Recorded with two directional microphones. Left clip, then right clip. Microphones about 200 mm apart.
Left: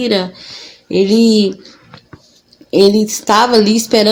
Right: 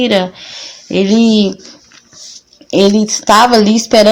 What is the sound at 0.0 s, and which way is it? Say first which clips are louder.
Speech: right 3 dB; 25° right (ahead or behind).